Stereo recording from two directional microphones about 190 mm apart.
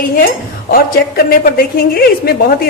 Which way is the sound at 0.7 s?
50° left (ahead or behind).